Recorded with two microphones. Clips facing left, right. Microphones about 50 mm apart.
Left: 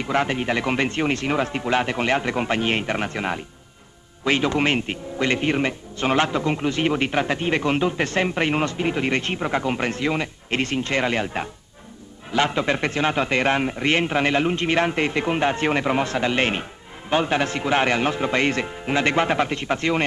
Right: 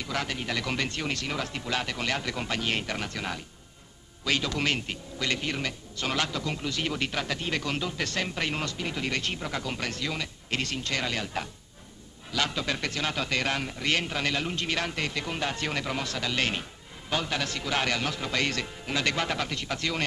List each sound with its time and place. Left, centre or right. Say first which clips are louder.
0.0 s a man's voice: left 10 dB; left